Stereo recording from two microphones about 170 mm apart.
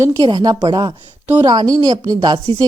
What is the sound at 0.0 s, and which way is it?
A woman's voice, 25° right (ahead or behind).